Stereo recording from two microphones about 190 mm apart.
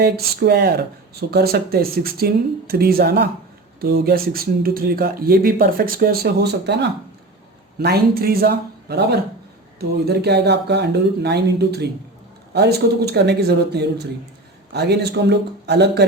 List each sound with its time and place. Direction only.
0.0 s speech: 55° right (ahead or behind)